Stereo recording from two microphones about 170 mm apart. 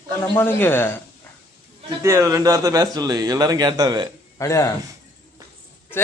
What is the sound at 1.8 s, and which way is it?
A man's voice, 15° right (ahead or behind).